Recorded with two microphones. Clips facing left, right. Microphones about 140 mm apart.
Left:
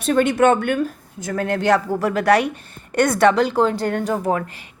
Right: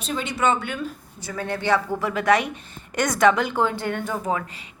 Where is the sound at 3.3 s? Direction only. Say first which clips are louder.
Left 5 dB; 35° left (ahead or behind); by 4.7 s 55° left (ahead or behind).